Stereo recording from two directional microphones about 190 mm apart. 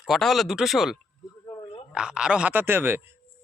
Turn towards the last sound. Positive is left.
turn(degrees=-10)  # may be behind; listen again after turning